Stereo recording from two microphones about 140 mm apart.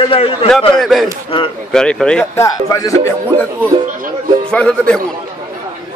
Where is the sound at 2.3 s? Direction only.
20° left (ahead or behind).